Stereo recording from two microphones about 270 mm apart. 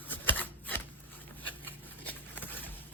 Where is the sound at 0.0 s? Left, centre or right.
Centre.